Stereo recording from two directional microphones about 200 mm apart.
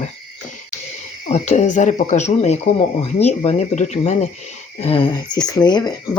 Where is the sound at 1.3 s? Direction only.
35° left (ahead or behind).